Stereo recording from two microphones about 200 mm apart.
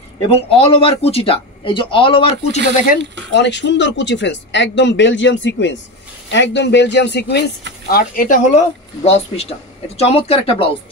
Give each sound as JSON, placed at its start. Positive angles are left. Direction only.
{"t": 0.3, "sound": "speech", "side_deg": 30}
{"t": 3.3, "sound": "speech", "side_deg": 60}
{"t": 7.9, "sound": "speech", "side_deg": 45}